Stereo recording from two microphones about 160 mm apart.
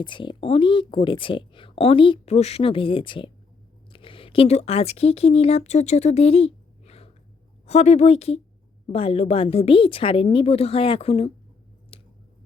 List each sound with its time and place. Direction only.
0.0 s speech: 30° left (ahead or behind)
11.9 s squish: 35° left (ahead or behind)